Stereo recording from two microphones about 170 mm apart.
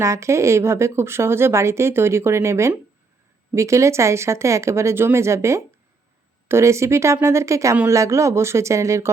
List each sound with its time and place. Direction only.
0.0 s speech: 15° right (ahead or behind)